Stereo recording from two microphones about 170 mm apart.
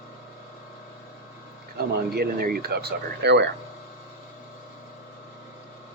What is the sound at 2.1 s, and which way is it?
Speech, 65° right (ahead or behind).